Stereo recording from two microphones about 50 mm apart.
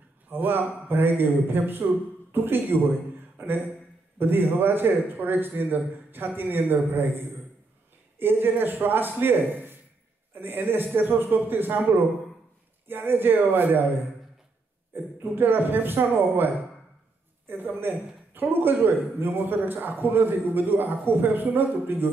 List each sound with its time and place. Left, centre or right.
0.3 s a man's voice: right
15.1 s a man's voice: right
17.5 s a man's voice: right